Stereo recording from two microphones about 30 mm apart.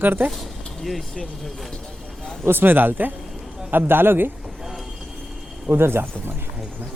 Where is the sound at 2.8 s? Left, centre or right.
Right.